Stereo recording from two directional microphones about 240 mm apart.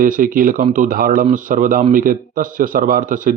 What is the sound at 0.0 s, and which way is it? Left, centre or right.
Speech, right.